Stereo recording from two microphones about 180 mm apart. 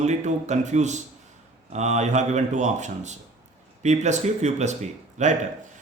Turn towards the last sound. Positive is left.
turn(degrees=-40)  # may be behind; listen again after turning